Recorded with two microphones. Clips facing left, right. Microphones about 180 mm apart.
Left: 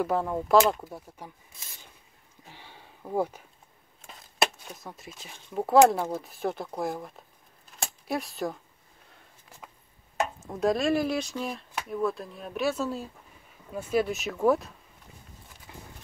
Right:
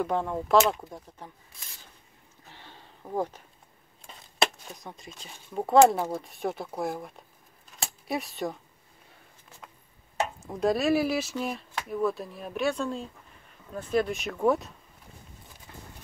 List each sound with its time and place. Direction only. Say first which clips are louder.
0.0 s speech: left 1 dB; 5° left (ahead or behind)
2.4 s a sound: left 1 dB; 15° left (ahead or behind)
4.1 s speech: even; centre (ahead or behind)
10.4 s speech: even; centre (ahead or behind)
15.7 s horse: left 1 dB; 15° left (ahead or behind)